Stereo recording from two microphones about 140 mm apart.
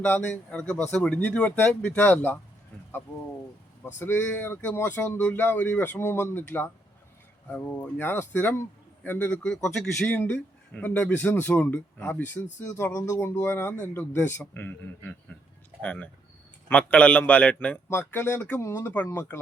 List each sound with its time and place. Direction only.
0.0 s a man's voice: 10° left (ahead or behind)
3.9 s a man's voice: 15° left (ahead or behind)